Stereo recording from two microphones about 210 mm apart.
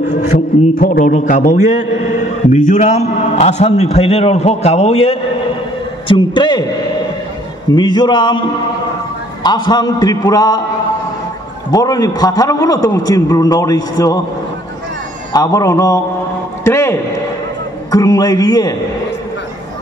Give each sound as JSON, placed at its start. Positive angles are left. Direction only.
{"t": 0.3, "sound": "a man's voice", "side_deg": 40}
{"t": 7.7, "sound": "a man's voice", "side_deg": 20}
{"t": 11.7, "sound": "a man's voice", "side_deg": 15}
{"t": 15.3, "sound": "a man's voice", "side_deg": 15}